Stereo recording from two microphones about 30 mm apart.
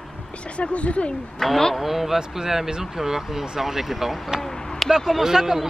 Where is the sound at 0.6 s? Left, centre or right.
Left.